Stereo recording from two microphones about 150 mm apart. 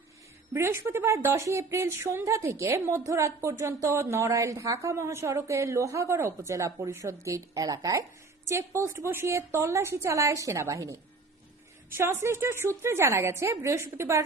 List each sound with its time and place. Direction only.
0.5 s a woman's voice: 15° right (ahead or behind)